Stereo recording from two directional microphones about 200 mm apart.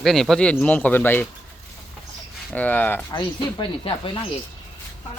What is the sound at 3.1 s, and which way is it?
Speech, 25° left (ahead or behind).